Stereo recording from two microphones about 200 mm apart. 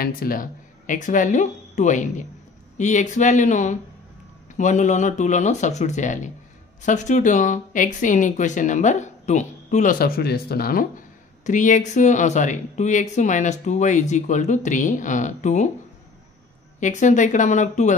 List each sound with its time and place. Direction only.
0.0 s speech: 45° left (ahead or behind)
16.8 s speech: 35° left (ahead or behind)